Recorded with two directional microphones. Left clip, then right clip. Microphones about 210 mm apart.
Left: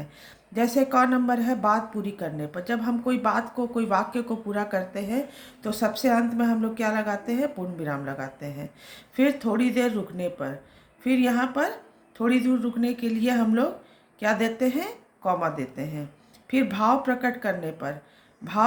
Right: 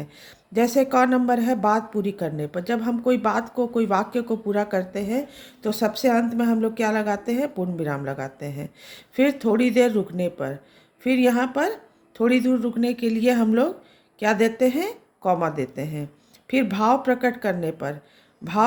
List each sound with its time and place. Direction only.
0.0 s speech: 50° right (ahead or behind)